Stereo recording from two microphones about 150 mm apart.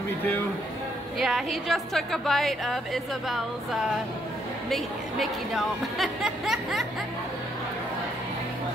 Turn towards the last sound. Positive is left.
turn(degrees=0)  # may be behind; listen again after turning